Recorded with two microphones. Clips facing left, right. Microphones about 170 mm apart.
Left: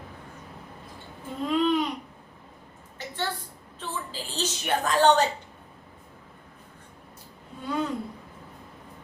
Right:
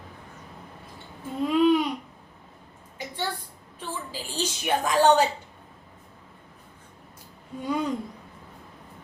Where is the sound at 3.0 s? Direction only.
10° right (ahead or behind).